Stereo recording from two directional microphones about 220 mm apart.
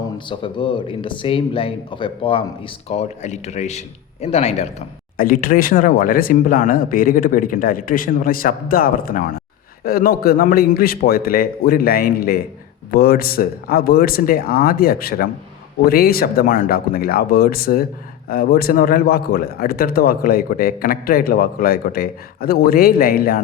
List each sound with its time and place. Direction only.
0.3 s a man's voice: 20° left (ahead or behind); by 23.4 s 40° left (ahead or behind)